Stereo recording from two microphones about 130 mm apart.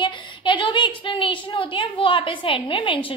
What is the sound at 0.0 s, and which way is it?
A woman's voice, 40° left (ahead or behind).